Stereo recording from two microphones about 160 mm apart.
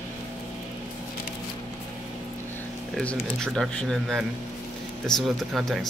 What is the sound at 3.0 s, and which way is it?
Speech, 5° left (ahead or behind).